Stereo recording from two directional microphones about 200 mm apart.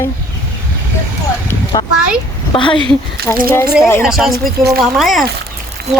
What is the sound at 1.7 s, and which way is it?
Speech, 20° left (ahead or behind).